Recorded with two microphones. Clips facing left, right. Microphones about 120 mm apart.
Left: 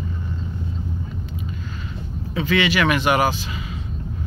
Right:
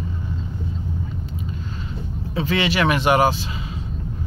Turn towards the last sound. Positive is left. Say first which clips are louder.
# right 2 dB
turn(degrees=-30)  # may be behind; listen again after turning